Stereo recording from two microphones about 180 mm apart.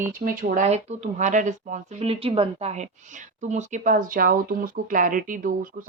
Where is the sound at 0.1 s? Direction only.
50° right (ahead or behind).